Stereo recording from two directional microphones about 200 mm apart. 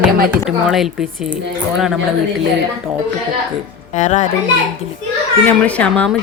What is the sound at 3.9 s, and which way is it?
Speech, 35° left (ahead or behind).